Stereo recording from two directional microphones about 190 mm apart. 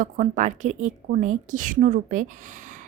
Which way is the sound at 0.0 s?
40° right (ahead or behind).